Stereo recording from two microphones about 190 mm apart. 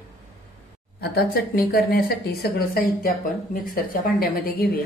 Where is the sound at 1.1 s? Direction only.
55° left (ahead or behind).